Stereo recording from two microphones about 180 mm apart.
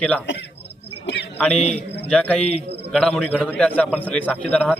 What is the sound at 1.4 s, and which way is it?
A man's voice, 5° left (ahead or behind).